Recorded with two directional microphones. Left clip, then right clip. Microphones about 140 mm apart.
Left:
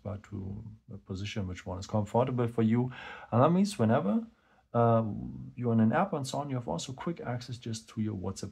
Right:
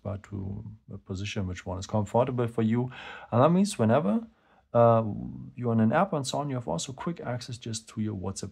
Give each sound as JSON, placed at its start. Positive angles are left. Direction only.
{"t": 1.0, "sound": "speech", "side_deg": -40}